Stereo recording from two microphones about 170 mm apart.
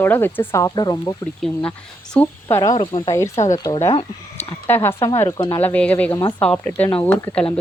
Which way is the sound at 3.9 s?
30° left (ahead or behind).